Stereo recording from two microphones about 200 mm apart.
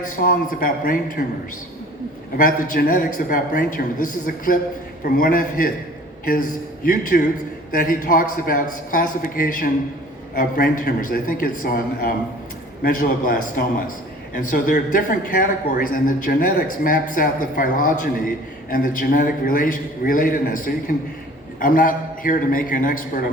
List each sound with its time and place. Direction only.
0.2 s speech: 45° left (ahead or behind)
2.4 s speech: 45° left (ahead or behind)
6.8 s speech: 45° left (ahead or behind)